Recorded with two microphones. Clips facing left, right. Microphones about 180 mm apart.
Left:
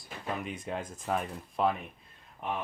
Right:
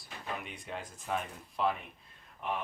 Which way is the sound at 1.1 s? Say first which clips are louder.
Left 3 dB; 45° left (ahead or behind).